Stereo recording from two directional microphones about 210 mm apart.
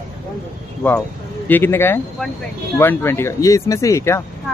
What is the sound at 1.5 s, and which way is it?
Speech, 10° left (ahead or behind).